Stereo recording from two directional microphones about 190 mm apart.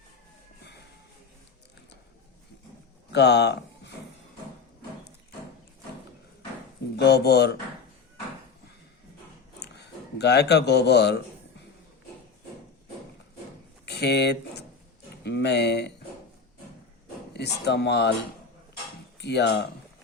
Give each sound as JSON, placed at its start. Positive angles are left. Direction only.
{"t": 3.1, "sound": "a sound", "side_deg": 60}
{"t": 6.9, "sound": "speech", "side_deg": 60}
{"t": 9.6, "sound": "a sound", "side_deg": 60}
{"t": 13.8, "sound": "speech", "side_deg": 60}
{"t": 17.3, "sound": "speech", "side_deg": 60}
{"t": 19.2, "sound": "speech", "side_deg": 60}